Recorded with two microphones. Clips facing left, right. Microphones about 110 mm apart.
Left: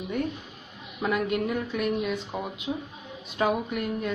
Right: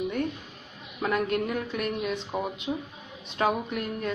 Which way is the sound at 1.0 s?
5° left (ahead or behind).